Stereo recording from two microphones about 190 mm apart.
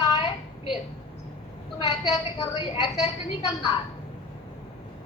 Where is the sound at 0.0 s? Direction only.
20° left (ahead or behind).